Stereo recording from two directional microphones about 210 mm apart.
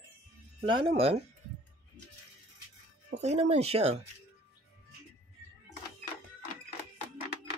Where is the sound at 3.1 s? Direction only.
30° right (ahead or behind).